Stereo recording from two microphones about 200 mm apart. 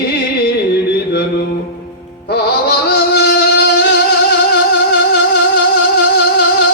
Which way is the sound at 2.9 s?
55° left (ahead or behind).